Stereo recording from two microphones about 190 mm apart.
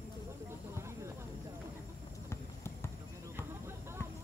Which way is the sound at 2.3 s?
15° left (ahead or behind).